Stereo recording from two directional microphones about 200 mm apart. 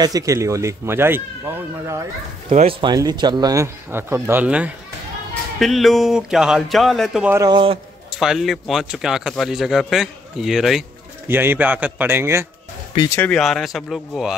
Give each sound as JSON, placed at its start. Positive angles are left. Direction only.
{"t": 0.0, "sound": "speech", "side_deg": -15}
{"t": 2.5, "sound": "speech", "side_deg": -30}
{"t": 7.3, "sound": "a man's voice", "side_deg": -20}
{"t": 8.1, "sound": "speech", "side_deg": 0}
{"t": 11.2, "sound": "speech", "side_deg": -10}
{"t": 13.1, "sound": "speech", "side_deg": 5}